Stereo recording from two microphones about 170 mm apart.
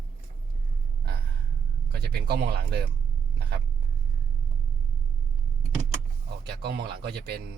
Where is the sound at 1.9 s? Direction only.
70° right (ahead or behind).